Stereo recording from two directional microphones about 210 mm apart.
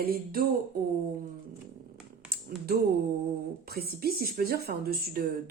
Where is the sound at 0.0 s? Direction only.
45° right (ahead or behind).